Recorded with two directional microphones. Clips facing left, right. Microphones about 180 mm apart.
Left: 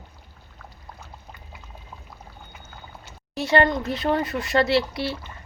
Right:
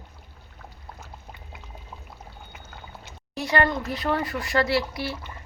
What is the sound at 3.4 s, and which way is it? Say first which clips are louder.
Speech: left 4 dB; 25° left (ahead or behind).